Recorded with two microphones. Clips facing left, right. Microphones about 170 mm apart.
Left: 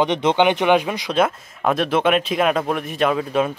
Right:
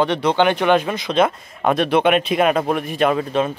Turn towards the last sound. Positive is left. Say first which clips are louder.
# right 1 dB
turn(degrees=5)  # may be behind; listen again after turning